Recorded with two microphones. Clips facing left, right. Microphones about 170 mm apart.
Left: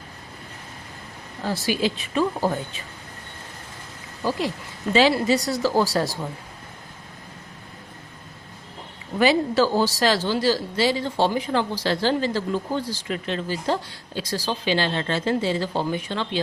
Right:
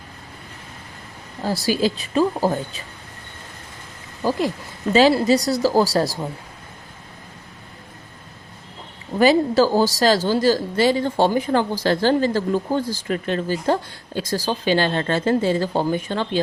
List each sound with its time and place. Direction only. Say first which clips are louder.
1.5 s speech: right 3 dB; 40° right (ahead or behind)
4.2 s speech: right 4 dB; 45° right (ahead or behind)
9.1 s speech: right 4 dB; 40° right (ahead or behind)